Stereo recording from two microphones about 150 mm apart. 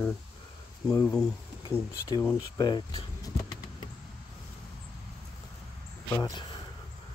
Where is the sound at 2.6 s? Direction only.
30° left (ahead or behind).